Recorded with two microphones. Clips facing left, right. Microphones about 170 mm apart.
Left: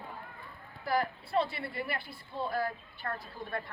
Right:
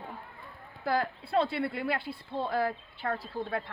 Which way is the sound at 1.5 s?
65° right (ahead or behind).